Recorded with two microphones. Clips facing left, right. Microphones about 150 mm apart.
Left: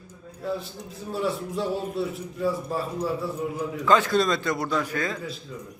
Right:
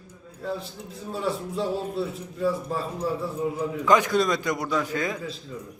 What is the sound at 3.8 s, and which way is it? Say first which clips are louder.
A man's voice: even; 15° right (ahead or behind).